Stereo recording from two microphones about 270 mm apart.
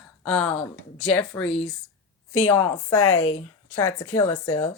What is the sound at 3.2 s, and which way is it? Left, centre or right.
Speech, left.